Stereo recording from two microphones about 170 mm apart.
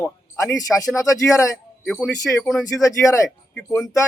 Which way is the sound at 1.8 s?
5° left (ahead or behind).